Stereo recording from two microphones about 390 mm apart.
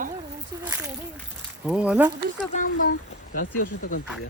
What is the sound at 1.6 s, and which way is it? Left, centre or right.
Speech, centre.